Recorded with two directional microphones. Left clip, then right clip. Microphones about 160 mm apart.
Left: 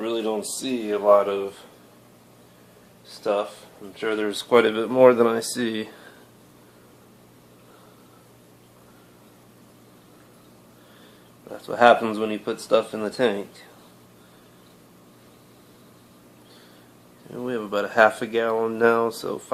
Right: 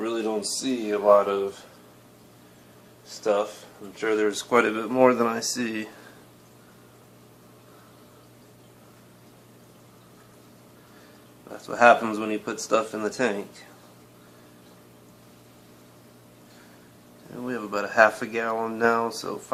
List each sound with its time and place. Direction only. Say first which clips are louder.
0.0 s speech: left 1 dB; 30° left (ahead or behind)
3.9 s speech: right 1 dB; 20° left (ahead or behind); by 5.9 s 40° left (ahead or behind)
11.6 s speech: left 1 dB; 30° left (ahead or behind)
17.3 s speech: left 3 dB; 40° left (ahead or behind)